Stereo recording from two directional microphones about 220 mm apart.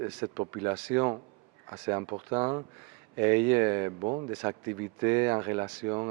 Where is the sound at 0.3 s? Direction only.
15° right (ahead or behind).